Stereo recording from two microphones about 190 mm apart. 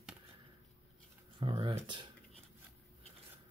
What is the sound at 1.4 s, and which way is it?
Speech, 30° right (ahead or behind).